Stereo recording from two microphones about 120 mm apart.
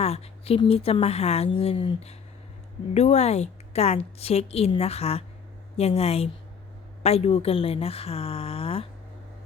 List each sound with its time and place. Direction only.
0.0 s a woman's voice: 60° left (ahead or behind)
1.5 s speech: 50° left (ahead or behind)
2.9 s a woman's voice: 65° left (ahead or behind)